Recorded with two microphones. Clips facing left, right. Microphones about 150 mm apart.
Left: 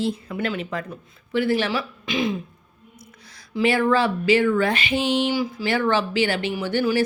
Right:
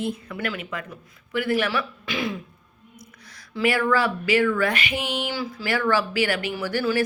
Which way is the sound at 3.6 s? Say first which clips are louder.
Left 2 dB; 25° left (ahead or behind).